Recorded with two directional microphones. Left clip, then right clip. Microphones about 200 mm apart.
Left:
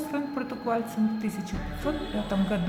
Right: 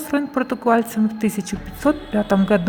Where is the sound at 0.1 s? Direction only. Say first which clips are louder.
Right 10 dB; 45° right (ahead or behind).